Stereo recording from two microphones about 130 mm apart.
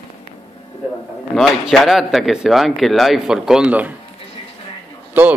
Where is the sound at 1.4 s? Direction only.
Centre (ahead or behind).